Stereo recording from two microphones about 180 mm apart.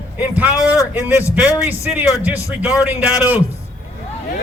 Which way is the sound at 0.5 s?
15° left (ahead or behind).